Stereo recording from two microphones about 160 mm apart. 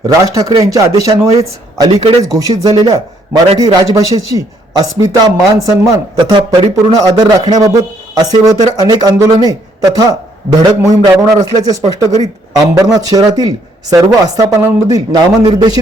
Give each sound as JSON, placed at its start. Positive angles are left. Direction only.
{"t": 0.0, "sound": "a man's voice", "side_deg": -20}
{"t": 2.3, "sound": "a man's voice", "side_deg": -25}